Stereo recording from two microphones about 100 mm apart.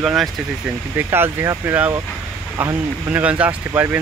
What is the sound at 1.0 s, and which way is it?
Speech, 25° right (ahead or behind).